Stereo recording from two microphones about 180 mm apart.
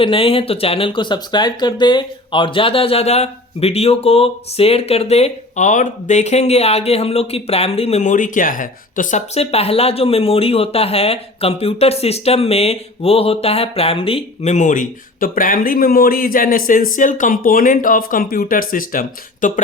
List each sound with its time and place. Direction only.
0.0 s speech: 30° left (ahead or behind); by 19.6 s 45° left (ahead or behind)